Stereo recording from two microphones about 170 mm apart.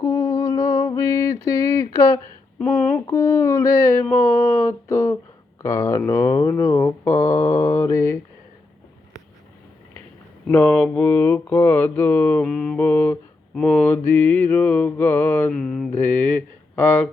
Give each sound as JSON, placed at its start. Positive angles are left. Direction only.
{"t": 0.0, "sound": "mantra", "side_deg": 20}
{"t": 2.6, "sound": "speech", "side_deg": 5}
{"t": 3.1, "sound": "mantra", "side_deg": 15}
{"t": 10.4, "sound": "mantra", "side_deg": 10}
{"t": 15.5, "sound": "speech", "side_deg": 0}
{"t": 16.0, "sound": "mantra", "side_deg": 10}